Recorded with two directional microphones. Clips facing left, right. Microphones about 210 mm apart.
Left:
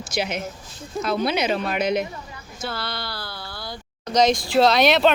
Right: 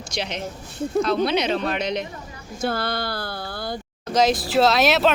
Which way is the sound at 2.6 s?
50° right (ahead or behind).